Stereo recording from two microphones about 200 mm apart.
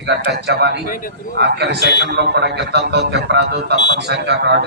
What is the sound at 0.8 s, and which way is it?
Speech, 45° left (ahead or behind).